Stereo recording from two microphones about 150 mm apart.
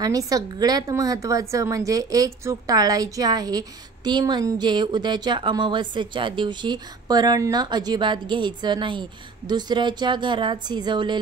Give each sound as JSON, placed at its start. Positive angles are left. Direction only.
{"t": 0.0, "sound": "a woman's voice", "side_deg": -25}